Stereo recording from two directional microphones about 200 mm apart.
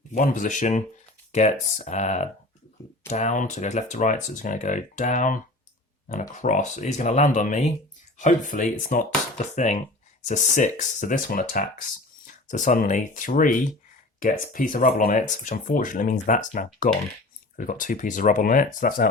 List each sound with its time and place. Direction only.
0.1 s speech: 40° left (ahead or behind)